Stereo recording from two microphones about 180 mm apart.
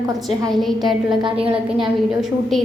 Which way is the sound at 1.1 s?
25° right (ahead or behind).